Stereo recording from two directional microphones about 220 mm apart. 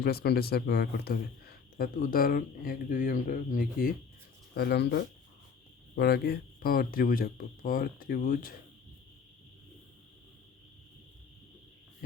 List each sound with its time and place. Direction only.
0.0 s a man's voice: 45° left (ahead or behind)